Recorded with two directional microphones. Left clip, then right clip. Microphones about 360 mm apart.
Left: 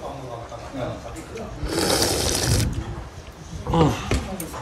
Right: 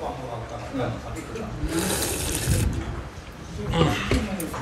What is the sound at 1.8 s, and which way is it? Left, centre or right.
Sewing machine, left.